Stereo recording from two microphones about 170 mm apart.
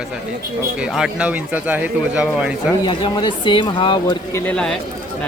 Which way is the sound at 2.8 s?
25° left (ahead or behind).